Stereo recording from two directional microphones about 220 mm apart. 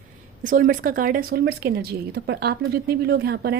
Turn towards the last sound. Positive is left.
turn(degrees=-45)  # may be behind; listen again after turning